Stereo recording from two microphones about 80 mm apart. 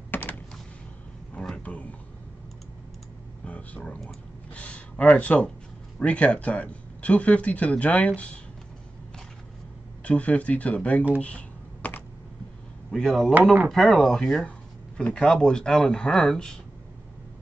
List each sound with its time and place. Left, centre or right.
0.1 s a sound: left
1.3 s a sound: centre
3.4 s speech: centre
10.0 s speech: centre
11.1 s computer keyboard: centre
12.9 s speech: centre